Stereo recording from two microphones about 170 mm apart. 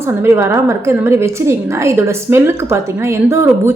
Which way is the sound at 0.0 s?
15° right (ahead or behind).